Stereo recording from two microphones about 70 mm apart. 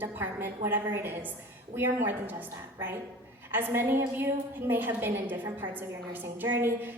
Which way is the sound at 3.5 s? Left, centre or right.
Right.